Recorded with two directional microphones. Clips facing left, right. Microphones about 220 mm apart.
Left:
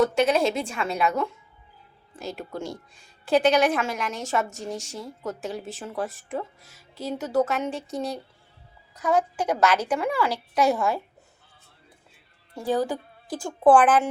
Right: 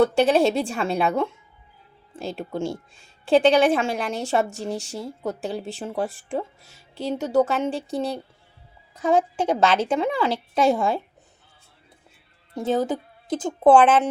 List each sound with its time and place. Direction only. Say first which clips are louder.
0.1 s a woman's voice: right 3 dB; 30° right (ahead or behind)
12.5 s speech: right 2 dB; 20° right (ahead or behind)